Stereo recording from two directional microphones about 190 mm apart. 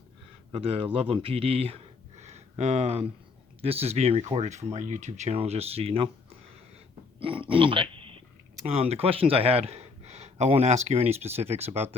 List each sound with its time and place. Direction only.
0.5 s speech: 30° right (ahead or behind)
7.2 s speech: 25° right (ahead or behind)